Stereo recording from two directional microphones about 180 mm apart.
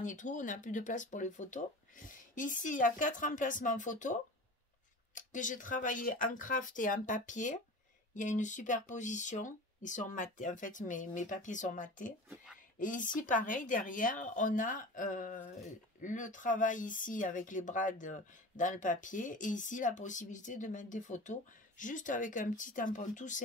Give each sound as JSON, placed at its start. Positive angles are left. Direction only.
{"t": 0.0, "sound": "speech", "side_deg": 45}